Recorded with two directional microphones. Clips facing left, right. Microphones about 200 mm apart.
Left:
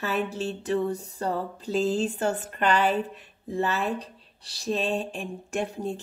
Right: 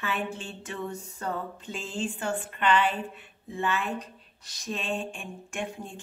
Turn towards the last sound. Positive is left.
turn(degrees=40)  # may be behind; listen again after turning